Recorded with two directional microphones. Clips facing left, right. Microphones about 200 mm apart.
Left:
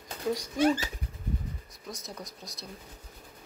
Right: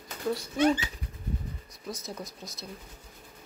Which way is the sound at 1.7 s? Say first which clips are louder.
Right 4 dB; centre (ahead or behind).